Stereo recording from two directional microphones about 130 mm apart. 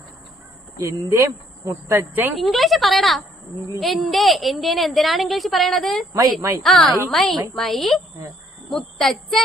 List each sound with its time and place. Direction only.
0.8 s speech: 20° right (ahead or behind)
2.4 s a woman's voice: centre (ahead or behind)